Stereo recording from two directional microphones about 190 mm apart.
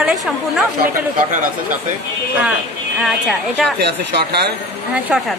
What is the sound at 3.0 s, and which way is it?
Speech, centre (ahead or behind).